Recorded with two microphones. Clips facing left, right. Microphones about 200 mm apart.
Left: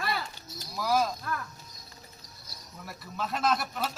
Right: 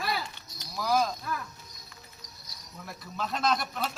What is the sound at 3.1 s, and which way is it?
Speech, 5° left (ahead or behind).